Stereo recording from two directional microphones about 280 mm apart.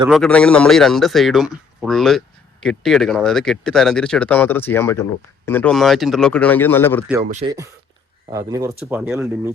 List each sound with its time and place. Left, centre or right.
0.1 s a man's voice: centre
7.3 s speech: right
8.3 s speech: centre
8.9 s a man's voice: centre